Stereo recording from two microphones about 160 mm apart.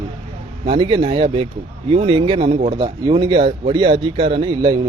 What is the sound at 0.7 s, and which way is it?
Speech, 30° right (ahead or behind).